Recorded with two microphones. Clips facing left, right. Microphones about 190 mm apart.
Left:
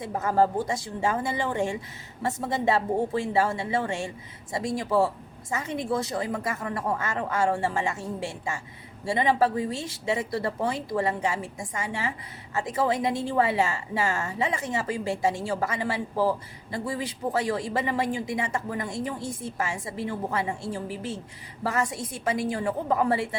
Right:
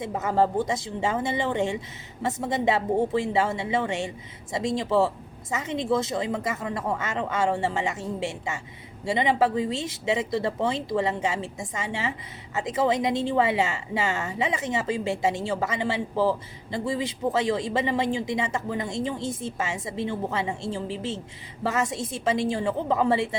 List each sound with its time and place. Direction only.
0.0 s speech: 20° right (ahead or behind)